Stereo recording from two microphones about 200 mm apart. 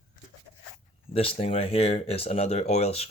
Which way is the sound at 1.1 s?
30° left (ahead or behind).